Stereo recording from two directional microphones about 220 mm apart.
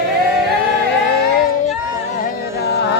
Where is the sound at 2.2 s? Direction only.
45° left (ahead or behind).